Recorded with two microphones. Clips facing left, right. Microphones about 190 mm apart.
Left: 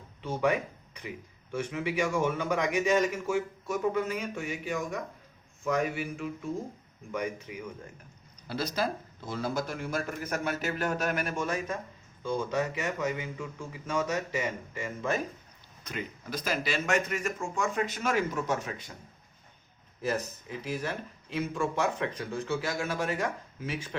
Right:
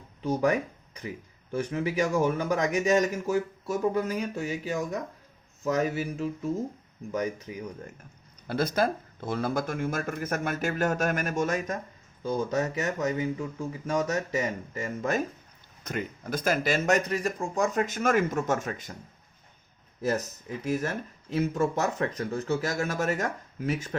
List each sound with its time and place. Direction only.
0.2 s speech: 40° right (ahead or behind)
1.5 s a man's voice: 40° right (ahead or behind)
8.4 s a man's voice: 50° right (ahead or behind)
20.7 s speech: 45° right (ahead or behind)